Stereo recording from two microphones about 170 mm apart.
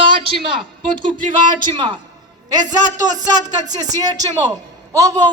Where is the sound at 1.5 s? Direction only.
25° right (ahead or behind).